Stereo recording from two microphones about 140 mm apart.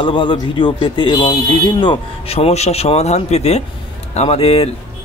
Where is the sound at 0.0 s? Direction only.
35° left (ahead or behind).